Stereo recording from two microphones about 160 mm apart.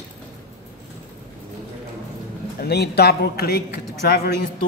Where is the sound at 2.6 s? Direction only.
85° left.